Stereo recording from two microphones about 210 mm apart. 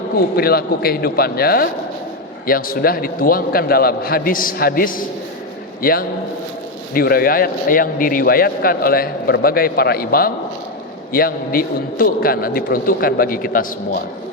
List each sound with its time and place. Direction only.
0.2 s a man's voice: 45° left (ahead or behind)